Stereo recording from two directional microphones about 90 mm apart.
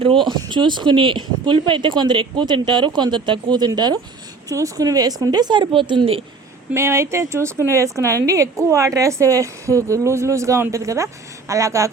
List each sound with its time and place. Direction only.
0.0 s speech: 70° right (ahead or behind)
4.4 s speech: 40° right (ahead or behind); by 6.2 s 75° right (ahead or behind)
6.7 s a woman's voice: 30° right (ahead or behind)